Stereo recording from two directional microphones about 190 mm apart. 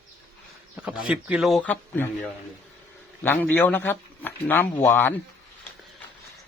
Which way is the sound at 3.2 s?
10° left (ahead or behind).